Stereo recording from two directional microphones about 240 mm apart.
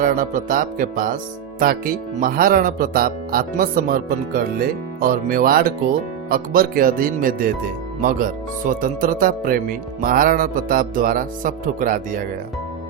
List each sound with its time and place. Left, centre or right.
0.0 s speech: right